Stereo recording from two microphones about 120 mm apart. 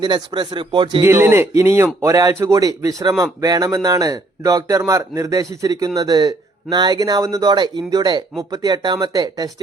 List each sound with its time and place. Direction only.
0.0 s speech: 40° right (ahead or behind)
1.0 s speech: 20° right (ahead or behind)